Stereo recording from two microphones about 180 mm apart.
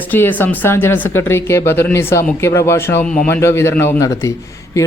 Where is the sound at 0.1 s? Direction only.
10° left (ahead or behind).